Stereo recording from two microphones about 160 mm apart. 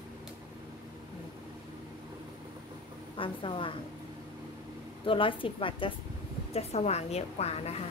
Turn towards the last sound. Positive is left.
turn(degrees=40)  # may be behind; listen again after turning